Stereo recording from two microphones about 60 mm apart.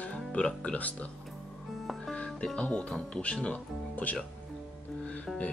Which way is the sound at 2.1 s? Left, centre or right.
Centre.